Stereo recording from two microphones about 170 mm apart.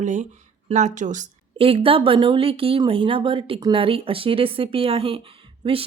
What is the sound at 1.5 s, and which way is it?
A woman's voice, 35° right (ahead or behind).